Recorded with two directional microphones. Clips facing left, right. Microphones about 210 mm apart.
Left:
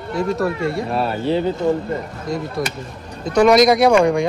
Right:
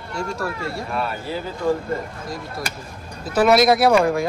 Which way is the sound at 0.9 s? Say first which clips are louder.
Left 6 dB; 30° left (ahead or behind).